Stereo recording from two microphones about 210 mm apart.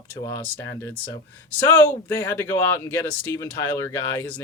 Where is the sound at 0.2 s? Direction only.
15° left (ahead or behind).